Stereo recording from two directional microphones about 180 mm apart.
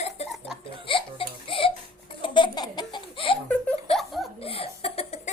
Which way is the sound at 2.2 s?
25° left (ahead or behind).